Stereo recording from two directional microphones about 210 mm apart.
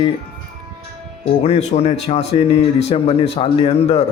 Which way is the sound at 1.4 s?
30° left (ahead or behind).